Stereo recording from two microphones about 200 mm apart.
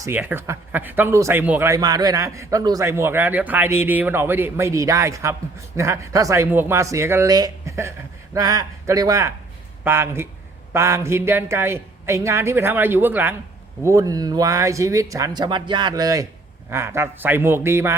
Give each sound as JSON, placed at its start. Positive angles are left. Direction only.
{"t": 0.0, "sound": "speech", "side_deg": -10}